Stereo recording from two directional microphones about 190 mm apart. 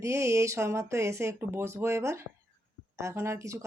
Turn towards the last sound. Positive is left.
turn(degrees=-15)  # may be behind; listen again after turning